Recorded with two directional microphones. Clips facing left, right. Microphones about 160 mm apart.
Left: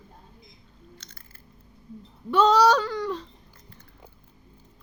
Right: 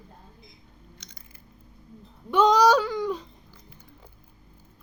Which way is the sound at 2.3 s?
15° right (ahead or behind).